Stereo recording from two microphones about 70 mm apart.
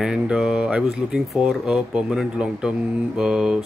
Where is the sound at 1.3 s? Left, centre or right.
Centre.